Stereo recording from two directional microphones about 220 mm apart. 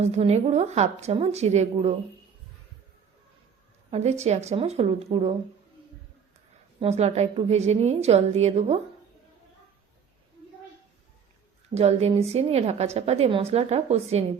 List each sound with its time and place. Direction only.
0.0 s a woman's voice: 30° right (ahead or behind)
3.9 s a woman's voice: 30° right (ahead or behind)
6.7 s a woman's voice: 30° right (ahead or behind)
11.7 s a woman's voice: 30° right (ahead or behind)